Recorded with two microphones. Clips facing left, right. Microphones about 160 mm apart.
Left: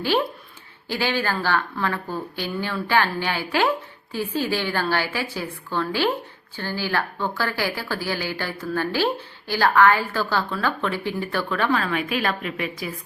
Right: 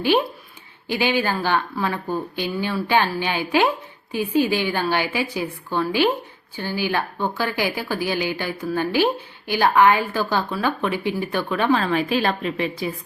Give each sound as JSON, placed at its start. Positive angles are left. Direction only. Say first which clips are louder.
{"t": 0.9, "sound": "a woman's voice", "louder": "right 3 dB", "side_deg": -15}
{"t": 11.8, "sound": "a woman's voice", "louder": "right 4 dB", "side_deg": -30}